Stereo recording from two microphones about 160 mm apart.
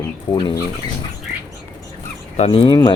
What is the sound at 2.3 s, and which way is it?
Speech, 40° left (ahead or behind).